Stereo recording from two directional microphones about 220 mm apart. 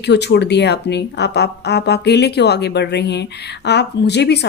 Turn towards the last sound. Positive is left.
turn(degrees=50)  # may be behind; listen again after turning